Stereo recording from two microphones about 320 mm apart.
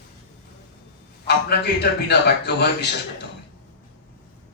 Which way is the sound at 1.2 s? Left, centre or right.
Left.